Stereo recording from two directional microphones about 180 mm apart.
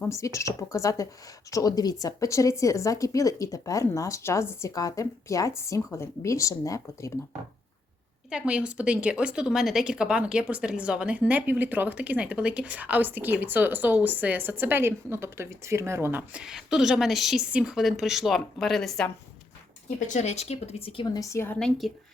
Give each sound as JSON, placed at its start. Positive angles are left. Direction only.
{"t": 0.0, "sound": "speech", "side_deg": 15}
{"t": 8.3, "sound": "a woman's voice", "side_deg": -5}
{"t": 20.1, "sound": "a woman's voice", "side_deg": 35}